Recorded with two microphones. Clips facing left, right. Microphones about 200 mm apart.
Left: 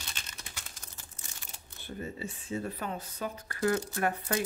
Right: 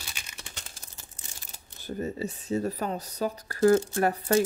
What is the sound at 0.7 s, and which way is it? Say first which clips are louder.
Speech: right 1 dB; 35° right (ahead or behind).